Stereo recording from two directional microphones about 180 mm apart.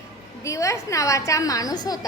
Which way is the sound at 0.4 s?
15° left (ahead or behind).